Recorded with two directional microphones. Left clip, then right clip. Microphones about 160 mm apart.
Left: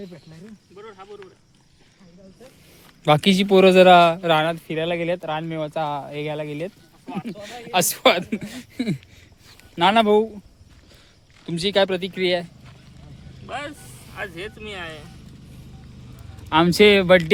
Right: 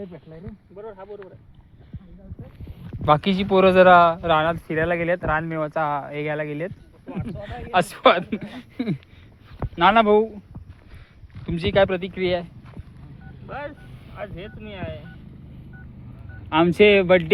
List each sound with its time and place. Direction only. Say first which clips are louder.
3.0 s speech: left 1 dB; 80° left; by 4.5 s 60° left (ahead or behind)
4.7 s speech: right 2 dB; 40° left (ahead or behind)
11.4 s speech: right 1 dB; 35° left (ahead or behind)
13.5 s vehicle: left 2 dB; 40° left (ahead or behind)
14.3 s speech: left 4 dB; 30° left (ahead or behind)
16.5 s speech: left 1 dB; 45° left (ahead or behind)